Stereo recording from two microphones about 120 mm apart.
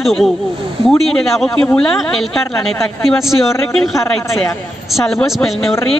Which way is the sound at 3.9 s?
25° left (ahead or behind).